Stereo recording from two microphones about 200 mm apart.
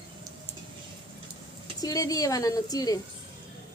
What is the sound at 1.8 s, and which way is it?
Speech, 20° left (ahead or behind).